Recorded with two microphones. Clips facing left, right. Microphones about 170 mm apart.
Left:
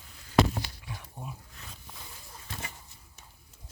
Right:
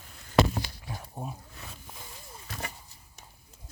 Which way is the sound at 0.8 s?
35° right (ahead or behind).